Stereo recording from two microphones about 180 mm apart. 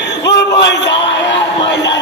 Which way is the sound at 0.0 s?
75° left (ahead or behind).